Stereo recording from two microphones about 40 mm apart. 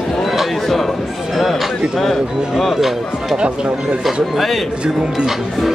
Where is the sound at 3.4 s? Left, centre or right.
Right.